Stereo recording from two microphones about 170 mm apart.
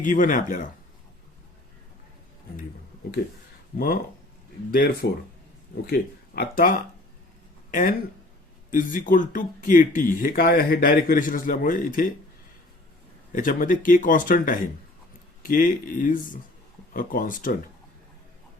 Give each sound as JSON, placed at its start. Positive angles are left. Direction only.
{"t": 0.0, "sound": "speech", "side_deg": 50}
{"t": 3.8, "sound": "speech", "side_deg": 60}
{"t": 13.3, "sound": "speech", "side_deg": 50}